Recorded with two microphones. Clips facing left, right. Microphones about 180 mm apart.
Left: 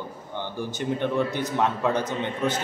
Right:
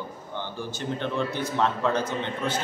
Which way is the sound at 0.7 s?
15° left (ahead or behind).